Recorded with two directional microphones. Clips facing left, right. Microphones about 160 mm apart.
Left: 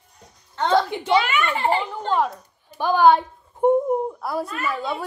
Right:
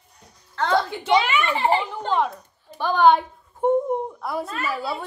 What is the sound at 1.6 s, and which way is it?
A woman's voice, centre (ahead or behind).